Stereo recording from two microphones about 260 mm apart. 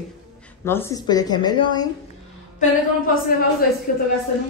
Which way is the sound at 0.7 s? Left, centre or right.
Centre.